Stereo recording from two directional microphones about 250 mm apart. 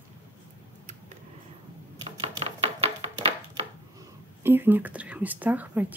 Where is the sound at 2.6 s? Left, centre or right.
Right.